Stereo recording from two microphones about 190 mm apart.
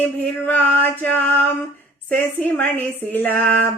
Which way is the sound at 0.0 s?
10° left (ahead or behind).